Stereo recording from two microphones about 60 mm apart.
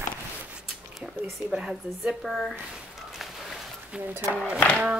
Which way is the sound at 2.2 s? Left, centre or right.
Centre.